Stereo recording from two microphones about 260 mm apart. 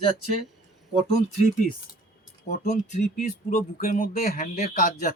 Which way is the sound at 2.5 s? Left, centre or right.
Left.